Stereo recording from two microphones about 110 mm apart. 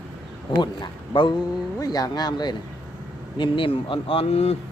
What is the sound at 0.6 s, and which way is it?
Speech, 45° left (ahead or behind).